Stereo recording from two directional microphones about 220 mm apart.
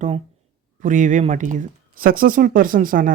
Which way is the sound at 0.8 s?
35° right (ahead or behind).